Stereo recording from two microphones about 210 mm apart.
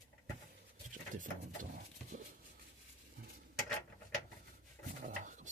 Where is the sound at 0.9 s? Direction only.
40° right (ahead or behind).